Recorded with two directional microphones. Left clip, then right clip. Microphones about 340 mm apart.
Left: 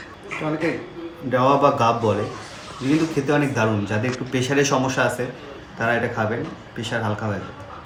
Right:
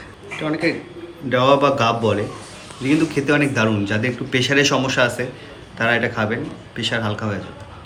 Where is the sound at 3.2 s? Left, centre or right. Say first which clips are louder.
Right 3 dB; centre.